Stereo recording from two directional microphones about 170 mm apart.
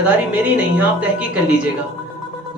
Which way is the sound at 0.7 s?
10° right (ahead or behind).